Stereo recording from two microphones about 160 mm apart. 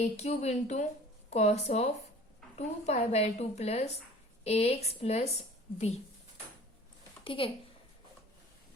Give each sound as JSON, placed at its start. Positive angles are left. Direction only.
{"t": 0.0, "sound": "a woman's voice", "side_deg": 45}
{"t": 7.3, "sound": "a woman's voice", "side_deg": 35}